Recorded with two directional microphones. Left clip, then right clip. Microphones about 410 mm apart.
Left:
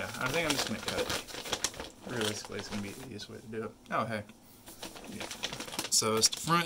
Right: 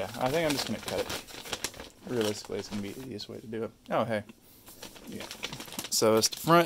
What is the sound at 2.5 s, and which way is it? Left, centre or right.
Speech, centre.